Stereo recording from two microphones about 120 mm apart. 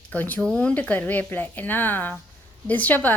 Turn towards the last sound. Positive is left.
turn(degrees=15)  # may be behind; listen again after turning